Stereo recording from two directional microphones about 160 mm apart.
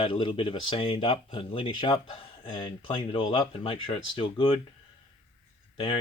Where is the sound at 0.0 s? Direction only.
35° left (ahead or behind).